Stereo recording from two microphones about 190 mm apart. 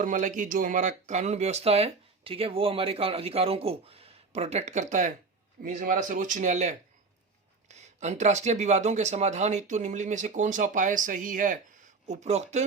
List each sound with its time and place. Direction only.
0.0 s speech: 40° right (ahead or behind)